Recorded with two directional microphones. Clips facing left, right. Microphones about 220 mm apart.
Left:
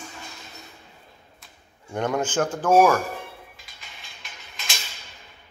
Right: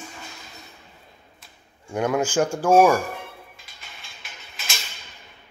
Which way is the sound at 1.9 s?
5° right (ahead or behind).